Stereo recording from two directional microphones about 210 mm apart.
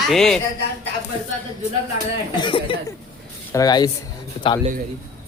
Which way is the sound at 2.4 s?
25° left (ahead or behind).